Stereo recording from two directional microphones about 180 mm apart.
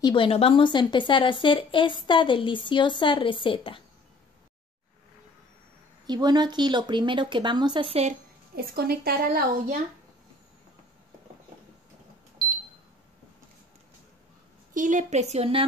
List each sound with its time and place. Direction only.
0.0 s a woman's voice: 30° left (ahead or behind)
6.0 s speech: 20° right (ahead or behind)
8.5 s a woman's voice: 60° right (ahead or behind)
14.7 s a woman's voice: 45° right (ahead or behind)